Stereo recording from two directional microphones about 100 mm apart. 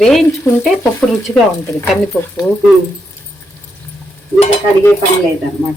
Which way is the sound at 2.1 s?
20° left (ahead or behind).